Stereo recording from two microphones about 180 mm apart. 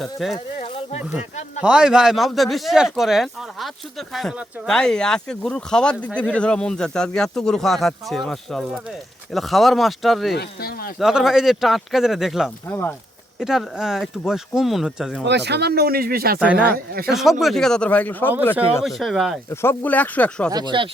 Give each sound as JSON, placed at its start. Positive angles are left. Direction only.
{"t": 0.0, "sound": "speech", "side_deg": 0}
{"t": 1.6, "sound": "speech", "side_deg": -5}
{"t": 10.3, "sound": "speech", "side_deg": 60}
{"t": 11.0, "sound": "speech", "side_deg": 0}
{"t": 15.3, "sound": "speech", "side_deg": -70}
{"t": 16.4, "sound": "speech", "side_deg": -5}
{"t": 16.7, "sound": "speech", "side_deg": -55}
{"t": 17.1, "sound": "speech", "side_deg": 0}
{"t": 18.8, "sound": "speech", "side_deg": 0}
{"t": 19.5, "sound": "speech", "side_deg": 10}
{"t": 20.5, "sound": "speech", "side_deg": -25}